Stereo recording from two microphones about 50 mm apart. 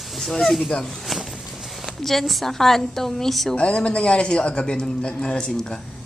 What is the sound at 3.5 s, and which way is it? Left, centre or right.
A man's voice, left.